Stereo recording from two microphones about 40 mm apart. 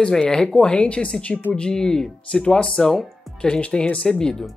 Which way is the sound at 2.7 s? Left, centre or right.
Centre.